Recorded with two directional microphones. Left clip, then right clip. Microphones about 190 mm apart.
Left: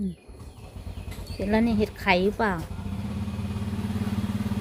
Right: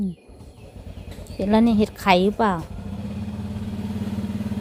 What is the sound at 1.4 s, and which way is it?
A woman's voice, 20° right (ahead or behind).